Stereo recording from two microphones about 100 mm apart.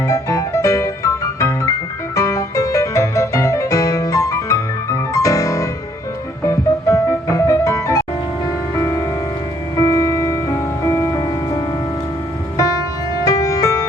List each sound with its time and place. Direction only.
0.1 s music: 30° left (ahead or behind)
13.2 s music: 35° left (ahead or behind)